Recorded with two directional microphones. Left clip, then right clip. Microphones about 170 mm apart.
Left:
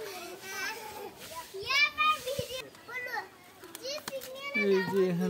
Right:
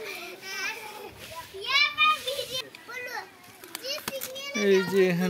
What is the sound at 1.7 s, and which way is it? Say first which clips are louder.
Children playing: right 4 dB; 25° right (ahead or behind).